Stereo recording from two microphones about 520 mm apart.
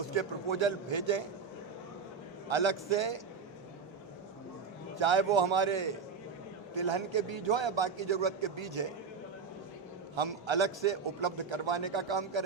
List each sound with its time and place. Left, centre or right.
0.1 s a man's voice: right
2.5 s a man's voice: right
4.9 s a man's voice: right
10.2 s a man's voice: right